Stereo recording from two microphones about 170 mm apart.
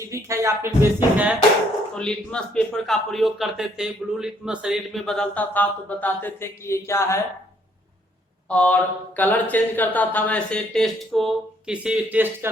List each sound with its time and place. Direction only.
0.1 s speech: 20° right (ahead or behind)
2.0 s speech: 5° left (ahead or behind)
8.4 s speech: 10° left (ahead or behind); by 12.5 s 10° right (ahead or behind)